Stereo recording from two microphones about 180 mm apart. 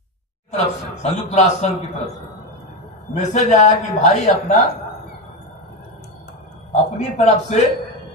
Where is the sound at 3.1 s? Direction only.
40° left (ahead or behind).